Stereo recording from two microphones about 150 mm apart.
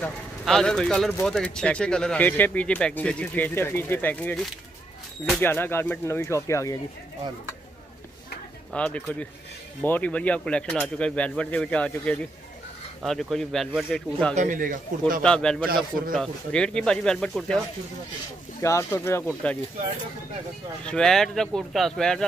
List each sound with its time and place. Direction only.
0.0 s speech: 5° left (ahead or behind); by 6.8 s 20° left (ahead or behind)
8.7 s speech: 10° left (ahead or behind)
14.3 s a man's voice: 60° right (ahead or behind)
15.2 s speech: 5° left (ahead or behind)
18.6 s speech: 20° left (ahead or behind)
20.8 s speech: 5° left (ahead or behind)